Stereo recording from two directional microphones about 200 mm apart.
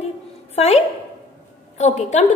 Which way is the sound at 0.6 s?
35° left (ahead or behind).